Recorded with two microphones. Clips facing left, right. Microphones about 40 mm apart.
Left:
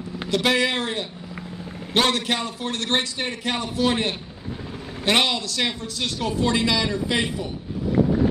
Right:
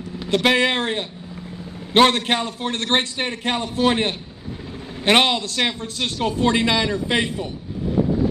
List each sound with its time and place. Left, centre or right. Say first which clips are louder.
0.3 s a man's voice: right 3 dB; right